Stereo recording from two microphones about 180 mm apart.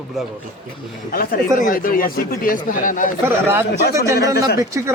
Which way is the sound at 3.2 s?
10° right (ahead or behind).